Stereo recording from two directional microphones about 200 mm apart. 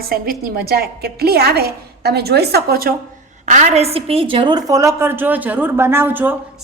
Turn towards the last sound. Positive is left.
turn(degrees=-10)  # may be behind; listen again after turning